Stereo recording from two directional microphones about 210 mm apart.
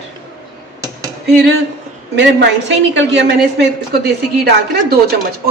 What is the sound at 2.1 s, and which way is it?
A woman's voice, 55° right (ahead or behind).